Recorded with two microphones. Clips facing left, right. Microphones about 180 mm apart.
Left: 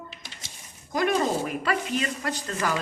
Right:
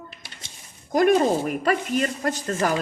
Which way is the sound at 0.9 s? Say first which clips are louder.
Right 6 dB; 45° right (ahead or behind).